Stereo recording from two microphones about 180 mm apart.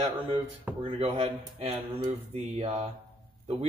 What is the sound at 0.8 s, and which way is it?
Speech, 30° right (ahead or behind).